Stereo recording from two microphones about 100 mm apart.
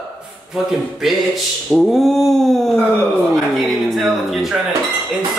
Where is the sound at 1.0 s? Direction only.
5° right (ahead or behind).